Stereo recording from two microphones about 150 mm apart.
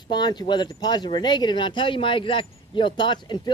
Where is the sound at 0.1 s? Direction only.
30° left (ahead or behind).